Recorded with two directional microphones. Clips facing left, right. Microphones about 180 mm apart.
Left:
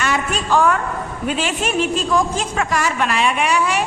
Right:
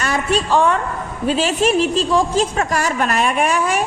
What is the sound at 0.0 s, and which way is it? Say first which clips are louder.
A woman's voice: right 2 dB; 35° right (ahead or behind).